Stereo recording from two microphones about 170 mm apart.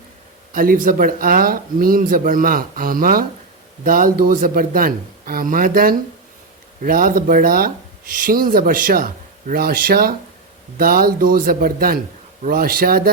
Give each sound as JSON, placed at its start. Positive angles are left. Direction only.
{"t": 0.5, "sound": "speech", "side_deg": -55}